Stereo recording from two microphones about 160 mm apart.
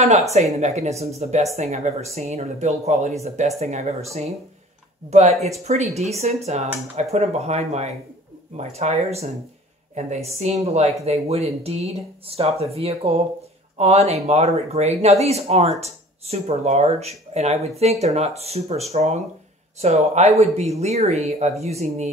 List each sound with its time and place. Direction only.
0.3 s speech: 45° right (ahead or behind)